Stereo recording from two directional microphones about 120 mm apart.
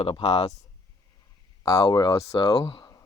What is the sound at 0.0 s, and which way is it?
Speech, 50° left (ahead or behind).